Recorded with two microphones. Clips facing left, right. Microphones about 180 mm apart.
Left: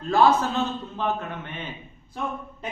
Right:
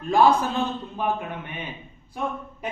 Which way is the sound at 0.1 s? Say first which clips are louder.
Right 1 dB; 15° right (ahead or behind).